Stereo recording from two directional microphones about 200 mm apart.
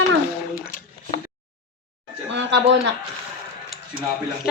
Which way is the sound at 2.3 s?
60° right (ahead or behind).